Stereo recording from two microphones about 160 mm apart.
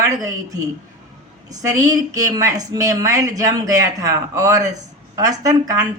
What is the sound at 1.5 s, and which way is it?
A man's voice, 20° right (ahead or behind).